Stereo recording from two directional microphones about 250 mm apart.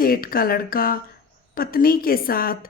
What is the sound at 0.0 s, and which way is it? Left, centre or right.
A woman's voice, left.